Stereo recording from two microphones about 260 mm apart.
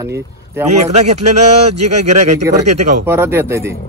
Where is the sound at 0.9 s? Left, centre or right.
Right.